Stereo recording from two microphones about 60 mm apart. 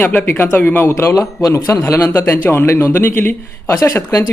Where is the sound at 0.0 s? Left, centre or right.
Left.